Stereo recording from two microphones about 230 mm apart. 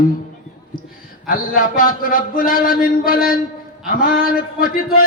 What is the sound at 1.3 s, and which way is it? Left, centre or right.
Speech, left.